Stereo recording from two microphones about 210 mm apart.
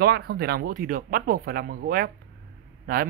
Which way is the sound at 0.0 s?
50° right (ahead or behind).